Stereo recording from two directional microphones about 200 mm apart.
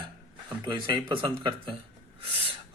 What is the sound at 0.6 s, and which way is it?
Speech, 25° right (ahead or behind).